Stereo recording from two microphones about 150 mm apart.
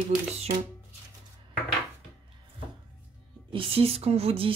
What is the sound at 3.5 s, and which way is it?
Speech, 40° right (ahead or behind).